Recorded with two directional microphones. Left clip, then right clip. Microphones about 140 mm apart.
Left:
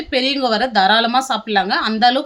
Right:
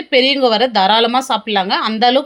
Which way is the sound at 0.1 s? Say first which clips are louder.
Right 5 dB; 15° right (ahead or behind).